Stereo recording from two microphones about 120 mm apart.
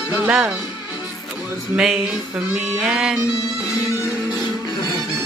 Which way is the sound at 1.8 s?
5° right (ahead or behind).